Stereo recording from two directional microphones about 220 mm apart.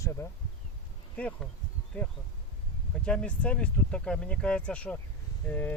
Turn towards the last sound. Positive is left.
turn(degrees=5)  # may be behind; listen again after turning